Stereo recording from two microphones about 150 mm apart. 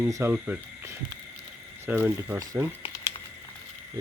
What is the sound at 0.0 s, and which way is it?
Speech, 15° right (ahead or behind).